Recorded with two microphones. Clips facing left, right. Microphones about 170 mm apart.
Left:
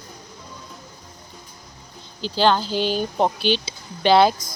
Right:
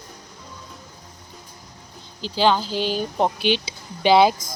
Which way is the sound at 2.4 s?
5° right (ahead or behind).